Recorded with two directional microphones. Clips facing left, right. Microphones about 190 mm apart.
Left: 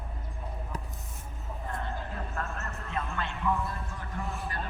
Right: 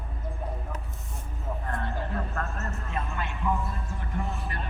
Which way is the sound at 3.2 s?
10° right (ahead or behind).